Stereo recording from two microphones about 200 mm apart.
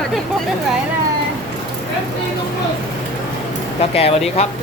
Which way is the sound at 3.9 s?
30° left (ahead or behind).